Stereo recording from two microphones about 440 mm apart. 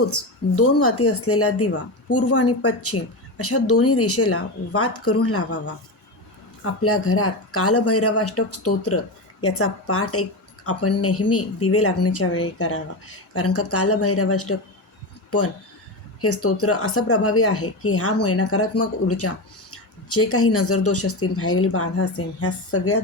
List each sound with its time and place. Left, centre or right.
0.0 s speech: left
16.2 s speech: left